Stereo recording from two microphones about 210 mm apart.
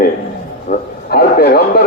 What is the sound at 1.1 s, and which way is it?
Speech, 50° left (ahead or behind).